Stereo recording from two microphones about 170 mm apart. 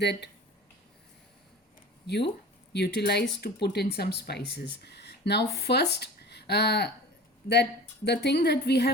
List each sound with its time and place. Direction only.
0.0 s speech: 80° left
2.0 s a woman's voice: 75° left (ahead or behind)